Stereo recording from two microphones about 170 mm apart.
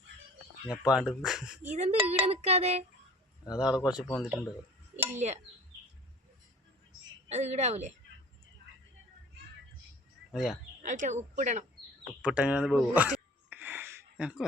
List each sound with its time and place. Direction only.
0.7 s speech: 5° right (ahead or behind)
1.7 s speech: 40° right (ahead or behind)
2.0 s child singing: 35° right (ahead or behind)
3.7 s speech: 25° left (ahead or behind)
4.1 s speech: centre (ahead or behind)
5.2 s speech: 45° right (ahead or behind)
7.3 s child singing: 40° right (ahead or behind)
10.3 s speech: centre (ahead or behind)
10.8 s speech: 45° right (ahead or behind)
12.2 s a sound: 5° right (ahead or behind)